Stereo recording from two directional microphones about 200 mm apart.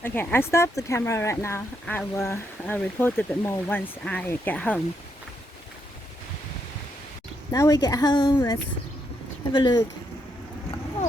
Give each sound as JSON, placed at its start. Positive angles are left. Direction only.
{"t": 0.0, "sound": "speech", "side_deg": 10}
{"t": 7.5, "sound": "a woman's voice", "side_deg": 15}